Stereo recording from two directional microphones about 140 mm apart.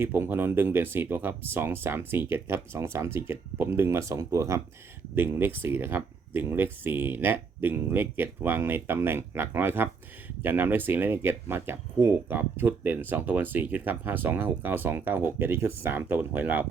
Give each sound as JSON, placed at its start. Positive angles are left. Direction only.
{"t": 0.0, "sound": "speech", "side_deg": -15}